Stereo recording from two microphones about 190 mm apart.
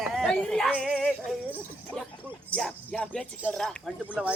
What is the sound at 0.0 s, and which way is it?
Speech, centre (ahead or behind).